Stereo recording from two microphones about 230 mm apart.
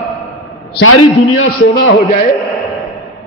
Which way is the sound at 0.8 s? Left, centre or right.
Left.